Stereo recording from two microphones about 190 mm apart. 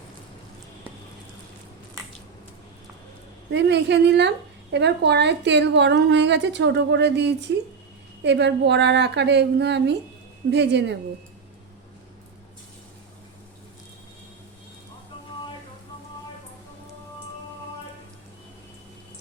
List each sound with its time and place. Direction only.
3.5 s a woman's voice: 65° right (ahead or behind)